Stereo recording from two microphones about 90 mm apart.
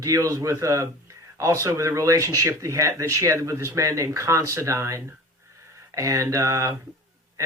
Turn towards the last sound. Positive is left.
turn(degrees=-35)  # may be behind; listen again after turning